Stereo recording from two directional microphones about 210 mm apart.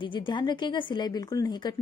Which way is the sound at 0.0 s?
20° left (ahead or behind).